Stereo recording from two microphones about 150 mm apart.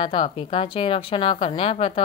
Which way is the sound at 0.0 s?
35° left (ahead or behind).